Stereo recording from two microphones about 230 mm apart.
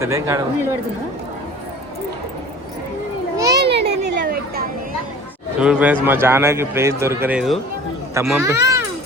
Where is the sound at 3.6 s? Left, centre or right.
Right.